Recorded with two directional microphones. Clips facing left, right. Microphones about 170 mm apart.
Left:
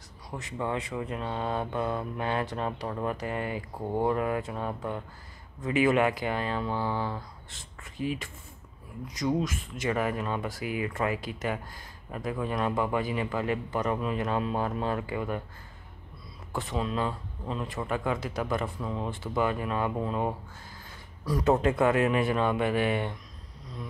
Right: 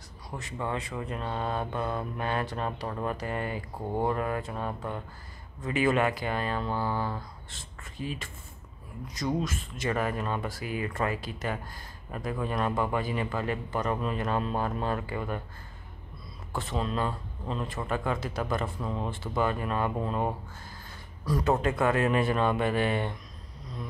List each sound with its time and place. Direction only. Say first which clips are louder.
0.4 s speech: left 2 dB; 20° left (ahead or behind)
7.4 s beatboxing: right 1 dB; 15° left (ahead or behind)
9.0 s speech: left 2 dB; 15° left (ahead or behind)
16.7 s speech: even; 5° left (ahead or behind)
18.8 s speech: even; centre (ahead or behind)
19.0 s speech: left 1 dB; 15° left (ahead or behind)
21.3 s speech: left 2 dB; 15° left (ahead or behind)